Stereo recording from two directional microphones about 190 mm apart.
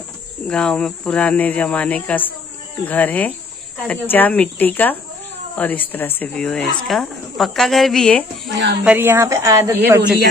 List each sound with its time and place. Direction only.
0.5 s speech: 5° left (ahead or behind)
8.5 s speech: 70° right (ahead or behind)
8.8 s speech: 10° right (ahead or behind)